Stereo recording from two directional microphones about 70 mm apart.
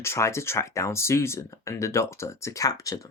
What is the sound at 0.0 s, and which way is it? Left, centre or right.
Speech, left.